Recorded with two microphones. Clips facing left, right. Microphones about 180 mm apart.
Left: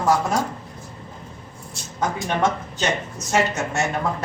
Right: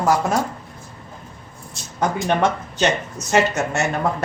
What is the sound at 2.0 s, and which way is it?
A woman's voice, 65° right (ahead or behind).